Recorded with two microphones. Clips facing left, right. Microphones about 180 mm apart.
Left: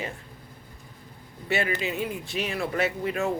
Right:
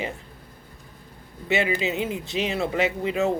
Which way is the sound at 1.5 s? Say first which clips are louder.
Right 3 dB; 20° right (ahead or behind).